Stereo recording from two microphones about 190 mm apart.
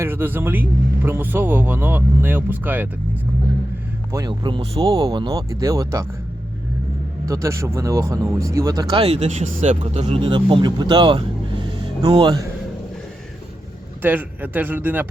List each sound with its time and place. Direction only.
0.0 s speech: 10° right (ahead or behind)
4.1 s speech: 20° right (ahead or behind)
7.3 s speech: 15° right (ahead or behind)
14.0 s speech: 10° right (ahead or behind)